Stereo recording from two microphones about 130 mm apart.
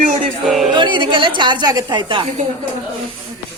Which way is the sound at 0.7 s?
35° right (ahead or behind).